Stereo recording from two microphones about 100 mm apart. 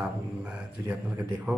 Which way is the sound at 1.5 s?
15° right (ahead or behind).